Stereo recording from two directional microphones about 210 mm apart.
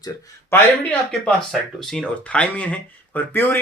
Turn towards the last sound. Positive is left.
turn(degrees=10)  # may be behind; listen again after turning